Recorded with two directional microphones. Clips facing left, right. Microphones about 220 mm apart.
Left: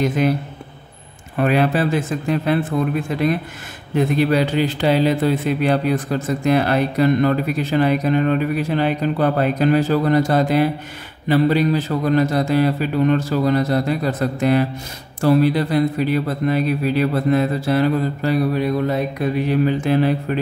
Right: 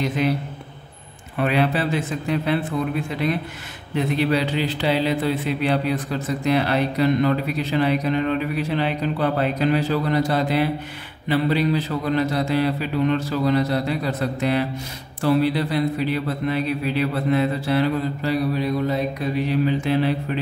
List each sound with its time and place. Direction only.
0.0 s a man's voice: 45° left (ahead or behind)
1.3 s a man's voice: 45° left (ahead or behind)
3.9 s a man's voice: 45° left (ahead or behind)